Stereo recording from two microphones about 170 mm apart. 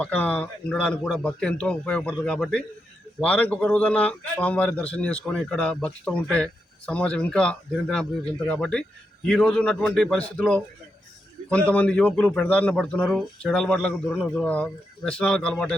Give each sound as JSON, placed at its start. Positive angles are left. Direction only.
{"t": 0.0, "sound": "a man's voice", "side_deg": 10}